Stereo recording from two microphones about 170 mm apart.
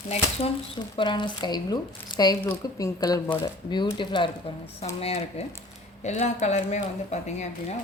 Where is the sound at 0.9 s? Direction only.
25° left (ahead or behind).